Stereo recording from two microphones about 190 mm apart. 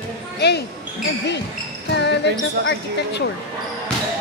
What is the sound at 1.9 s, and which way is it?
Basketball bounce, 65° left (ahead or behind).